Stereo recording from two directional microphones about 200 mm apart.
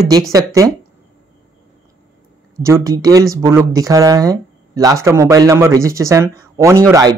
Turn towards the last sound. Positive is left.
turn(degrees=-15)  # may be behind; listen again after turning